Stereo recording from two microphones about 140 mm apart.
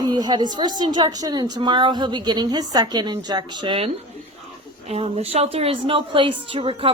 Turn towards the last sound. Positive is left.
turn(degrees=-40)  # may be behind; listen again after turning